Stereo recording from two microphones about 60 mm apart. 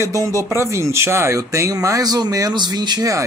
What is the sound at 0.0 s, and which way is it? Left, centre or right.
Speech, right.